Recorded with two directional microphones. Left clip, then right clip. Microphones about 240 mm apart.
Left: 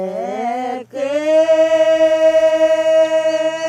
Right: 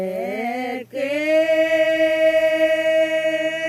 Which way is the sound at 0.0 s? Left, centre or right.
Centre.